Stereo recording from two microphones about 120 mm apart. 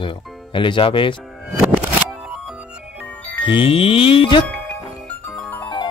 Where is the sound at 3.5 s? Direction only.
50° left (ahead or behind).